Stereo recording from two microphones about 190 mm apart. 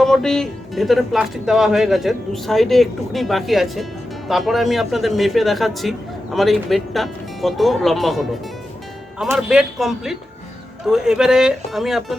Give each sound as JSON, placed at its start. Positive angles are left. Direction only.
{"t": 0.0, "sound": "speech", "side_deg": 0}
{"t": 9.3, "sound": "speech", "side_deg": -5}